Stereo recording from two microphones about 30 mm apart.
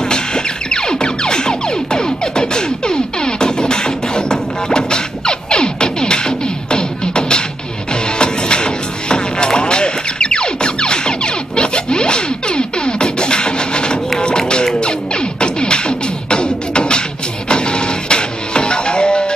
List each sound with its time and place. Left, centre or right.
0.1 s music: left